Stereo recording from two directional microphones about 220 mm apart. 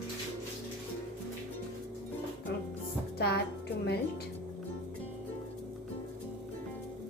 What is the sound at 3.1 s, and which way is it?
Speech, 45° left (ahead or behind).